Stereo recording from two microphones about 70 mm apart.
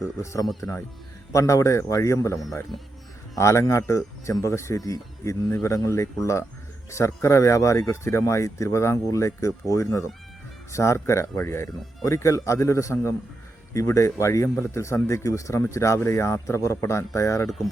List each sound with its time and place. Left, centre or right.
0.0 s speech: left
10.7 s speech: left